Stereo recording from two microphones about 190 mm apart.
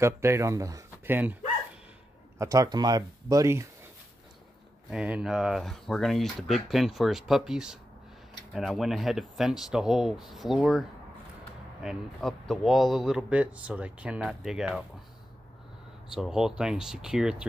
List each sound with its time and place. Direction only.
0.0 s speech: 15° right (ahead or behind)
2.3 s speech: 15° right (ahead or behind)
4.8 s speech: 5° right (ahead or behind)
16.1 s speech: centre (ahead or behind)